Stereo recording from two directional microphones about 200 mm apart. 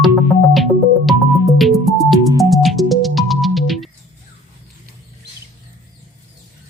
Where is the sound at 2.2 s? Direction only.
15° right (ahead or behind).